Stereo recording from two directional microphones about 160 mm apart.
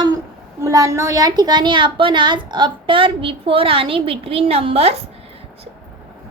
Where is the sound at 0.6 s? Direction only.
20° right (ahead or behind); by 4.9 s 40° right (ahead or behind).